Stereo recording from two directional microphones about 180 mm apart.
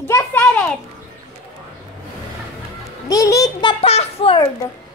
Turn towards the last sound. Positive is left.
turn(degrees=30)  # may be behind; listen again after turning